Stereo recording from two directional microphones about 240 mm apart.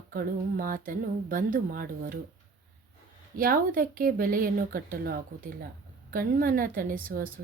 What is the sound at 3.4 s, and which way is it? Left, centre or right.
Speech, right.